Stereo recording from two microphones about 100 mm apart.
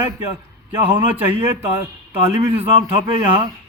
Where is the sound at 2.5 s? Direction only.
65° right (ahead or behind).